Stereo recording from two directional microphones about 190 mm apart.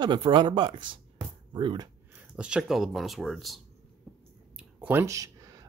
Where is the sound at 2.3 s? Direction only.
5° right (ahead or behind).